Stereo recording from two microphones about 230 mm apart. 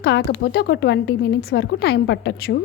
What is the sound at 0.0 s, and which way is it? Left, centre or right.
Speech, left.